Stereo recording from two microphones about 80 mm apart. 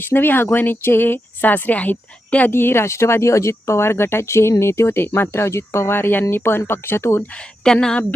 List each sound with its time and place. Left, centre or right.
0.0 s speech: left
7.3 s a woman's voice: centre